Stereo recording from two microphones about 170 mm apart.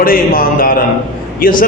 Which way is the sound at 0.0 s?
60° left (ahead or behind).